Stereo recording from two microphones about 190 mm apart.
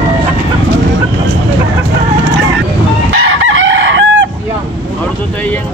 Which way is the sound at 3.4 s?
90° right.